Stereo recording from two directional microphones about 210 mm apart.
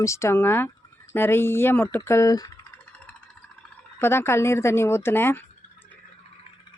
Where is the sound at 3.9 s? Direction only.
10° left (ahead or behind).